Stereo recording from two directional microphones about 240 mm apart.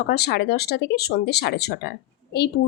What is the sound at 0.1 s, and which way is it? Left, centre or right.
A woman's voice, left.